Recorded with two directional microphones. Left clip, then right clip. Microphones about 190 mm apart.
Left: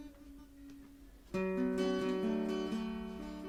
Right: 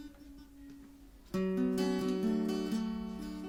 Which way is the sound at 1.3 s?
35° right (ahead or behind).